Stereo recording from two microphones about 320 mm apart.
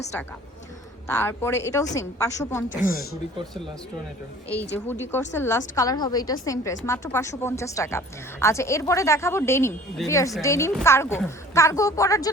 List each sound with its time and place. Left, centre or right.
1.1 s a woman's voice: centre
2.6 s a woman's voice: left
5.3 s a woman's voice: centre